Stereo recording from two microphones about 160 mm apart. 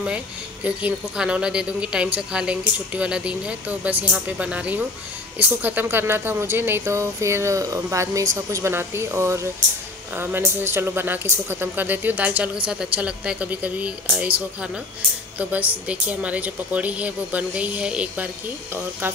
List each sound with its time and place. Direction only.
0.7 s speech: 5° right (ahead or behind)